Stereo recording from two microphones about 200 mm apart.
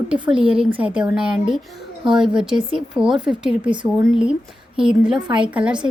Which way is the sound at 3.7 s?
25° right (ahead or behind).